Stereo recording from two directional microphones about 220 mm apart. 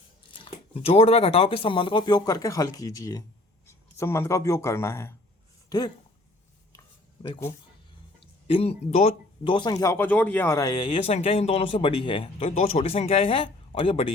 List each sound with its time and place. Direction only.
0.3 s speech: 25° left (ahead or behind)
6.7 s a sound: 15° left (ahead or behind)
8.2 s speech: 25° left (ahead or behind)